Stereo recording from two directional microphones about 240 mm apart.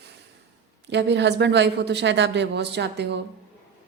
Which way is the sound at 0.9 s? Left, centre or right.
Right.